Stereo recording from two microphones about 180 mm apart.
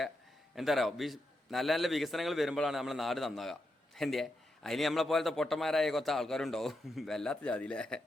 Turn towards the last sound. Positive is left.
turn(degrees=5)  # may be behind; listen again after turning